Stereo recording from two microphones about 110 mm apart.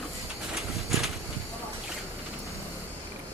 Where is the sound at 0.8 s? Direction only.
Centre (ahead or behind).